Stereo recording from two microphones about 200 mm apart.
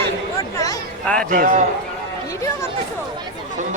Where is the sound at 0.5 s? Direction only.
20° left (ahead or behind).